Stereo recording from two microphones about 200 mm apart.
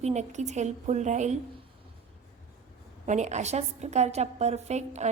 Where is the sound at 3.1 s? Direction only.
35° right (ahead or behind).